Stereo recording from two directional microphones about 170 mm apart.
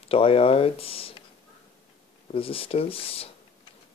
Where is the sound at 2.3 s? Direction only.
35° left (ahead or behind).